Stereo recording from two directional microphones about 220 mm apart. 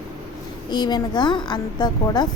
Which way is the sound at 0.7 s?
20° left (ahead or behind).